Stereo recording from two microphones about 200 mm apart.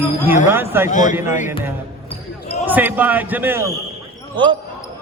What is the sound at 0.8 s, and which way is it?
Speech, 40° left (ahead or behind).